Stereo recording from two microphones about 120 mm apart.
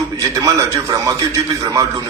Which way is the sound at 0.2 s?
30° right (ahead or behind).